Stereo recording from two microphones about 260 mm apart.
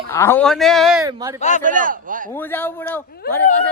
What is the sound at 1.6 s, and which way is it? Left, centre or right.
Speech, right.